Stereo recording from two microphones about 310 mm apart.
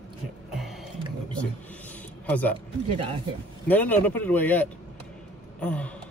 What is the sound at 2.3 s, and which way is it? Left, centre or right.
Speech, centre.